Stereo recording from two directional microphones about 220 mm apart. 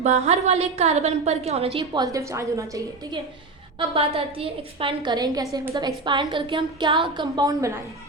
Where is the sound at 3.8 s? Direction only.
25° right (ahead or behind).